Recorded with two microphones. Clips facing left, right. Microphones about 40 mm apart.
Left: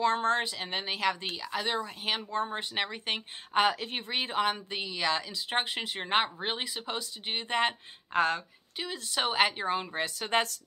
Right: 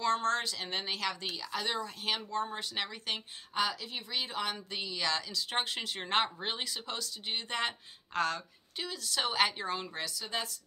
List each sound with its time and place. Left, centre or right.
0.0 s a woman's voice: left
3.5 s a woman's voice: left
10.0 s a woman's voice: left